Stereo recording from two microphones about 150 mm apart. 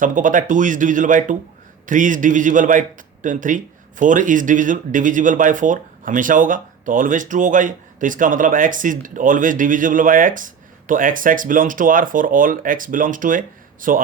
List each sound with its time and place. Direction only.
0.0 s a man's voice: 60° right (ahead or behind)